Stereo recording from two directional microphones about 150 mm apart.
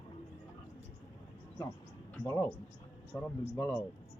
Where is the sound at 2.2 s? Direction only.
20° left (ahead or behind).